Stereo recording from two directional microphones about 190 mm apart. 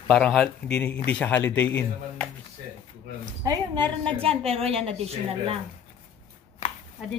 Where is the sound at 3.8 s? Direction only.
30° right (ahead or behind).